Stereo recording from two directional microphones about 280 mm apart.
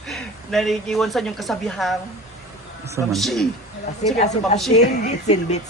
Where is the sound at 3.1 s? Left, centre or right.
Centre.